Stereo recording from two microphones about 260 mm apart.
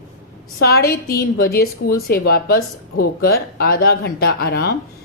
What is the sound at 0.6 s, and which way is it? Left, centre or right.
A woman's voice, left.